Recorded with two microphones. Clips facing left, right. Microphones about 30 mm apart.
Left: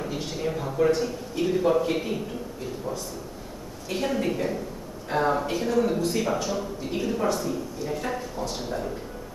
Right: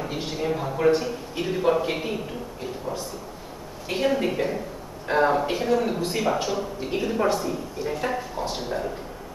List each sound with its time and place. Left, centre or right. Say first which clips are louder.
0.1 s a man's voice: right 4 dB; centre
3.9 s a woman's voice: right 3 dB; centre